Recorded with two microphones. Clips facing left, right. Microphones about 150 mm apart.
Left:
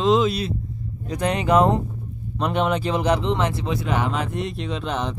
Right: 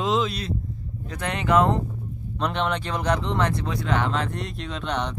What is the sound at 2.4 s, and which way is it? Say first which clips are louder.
Speech: left 4 dB; 5° left (ahead or behind).